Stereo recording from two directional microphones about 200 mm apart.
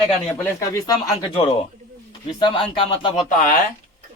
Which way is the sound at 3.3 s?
40° left (ahead or behind).